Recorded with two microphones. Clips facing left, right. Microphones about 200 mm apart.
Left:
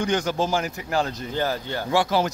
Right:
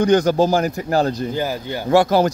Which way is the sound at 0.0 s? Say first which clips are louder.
Right 9 dB; 40° right (ahead or behind).